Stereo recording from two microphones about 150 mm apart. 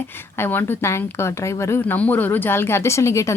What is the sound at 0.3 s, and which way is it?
Speech, 15° left (ahead or behind).